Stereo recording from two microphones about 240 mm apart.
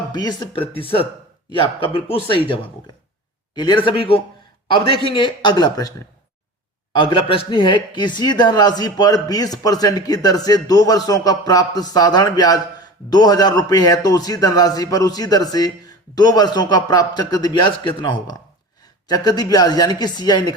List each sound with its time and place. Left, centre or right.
0.1 s a man's voice: centre
3.5 s a man's voice: centre
6.9 s speech: centre